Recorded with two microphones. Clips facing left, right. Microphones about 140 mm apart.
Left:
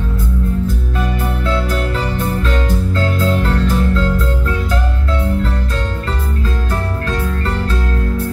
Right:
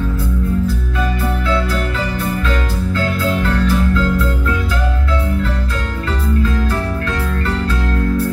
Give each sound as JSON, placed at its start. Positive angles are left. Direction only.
{"t": 2.9, "sound": "music", "side_deg": 30}